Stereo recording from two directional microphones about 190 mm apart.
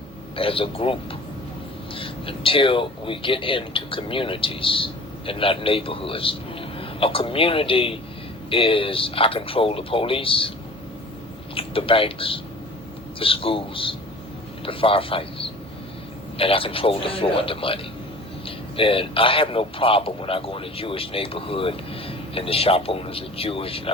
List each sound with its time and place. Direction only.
0.3 s speech: 30° left (ahead or behind)
2.0 s speech: 30° left (ahead or behind)
11.5 s a man's voice: 30° left (ahead or behind)